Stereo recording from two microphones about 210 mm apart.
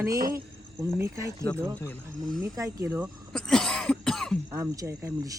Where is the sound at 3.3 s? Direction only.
5° left (ahead or behind).